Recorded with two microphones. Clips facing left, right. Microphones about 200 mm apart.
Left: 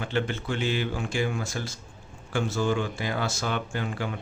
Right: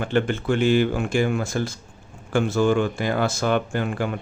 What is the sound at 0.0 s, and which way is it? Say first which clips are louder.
Speech: right 6 dB; 55° right (ahead or behind).